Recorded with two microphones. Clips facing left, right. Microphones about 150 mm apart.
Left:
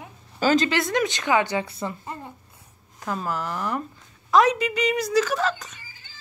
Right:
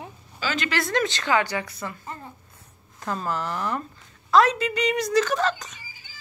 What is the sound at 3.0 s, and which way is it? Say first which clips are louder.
A woman's voice: even; 5° left (ahead or behind).